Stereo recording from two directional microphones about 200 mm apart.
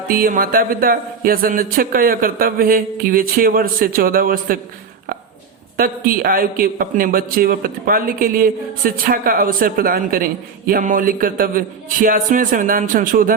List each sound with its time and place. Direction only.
0.1 s a man's voice: 45° right (ahead or behind)
5.7 s a man's voice: 45° right (ahead or behind)